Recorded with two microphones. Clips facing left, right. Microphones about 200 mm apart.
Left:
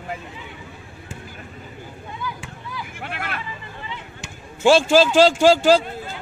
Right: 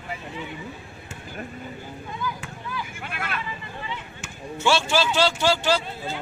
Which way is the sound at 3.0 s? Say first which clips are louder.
Left 4 dB; 60° left (ahead or behind).